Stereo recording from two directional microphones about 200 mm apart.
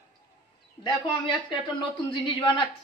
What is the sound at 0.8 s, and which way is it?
Speech, 25° left (ahead or behind).